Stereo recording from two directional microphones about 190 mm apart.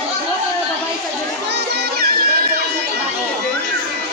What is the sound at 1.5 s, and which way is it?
Music, 55° right (ahead or behind).